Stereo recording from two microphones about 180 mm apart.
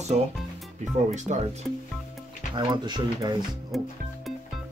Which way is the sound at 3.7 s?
Centre (ahead or behind).